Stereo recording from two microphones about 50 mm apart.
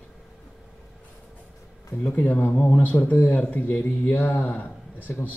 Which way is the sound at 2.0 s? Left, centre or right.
Left.